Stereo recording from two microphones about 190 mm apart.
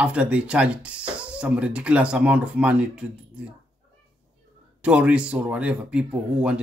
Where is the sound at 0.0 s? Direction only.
5° right (ahead or behind).